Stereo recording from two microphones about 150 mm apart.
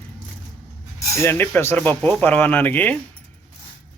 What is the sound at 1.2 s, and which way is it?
Speech, 15° left (ahead or behind).